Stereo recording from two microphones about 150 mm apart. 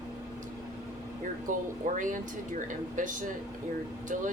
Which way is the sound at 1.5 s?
60° right (ahead or behind).